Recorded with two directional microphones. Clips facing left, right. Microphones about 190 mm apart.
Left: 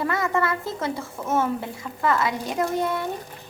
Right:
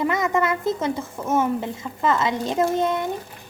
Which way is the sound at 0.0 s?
20° right (ahead or behind).